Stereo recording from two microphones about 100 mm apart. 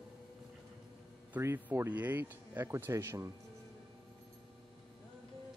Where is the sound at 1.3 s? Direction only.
20° right (ahead or behind).